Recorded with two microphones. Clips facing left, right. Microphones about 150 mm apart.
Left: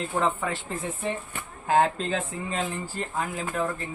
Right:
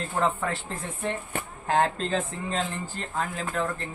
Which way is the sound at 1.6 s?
5° left (ahead or behind).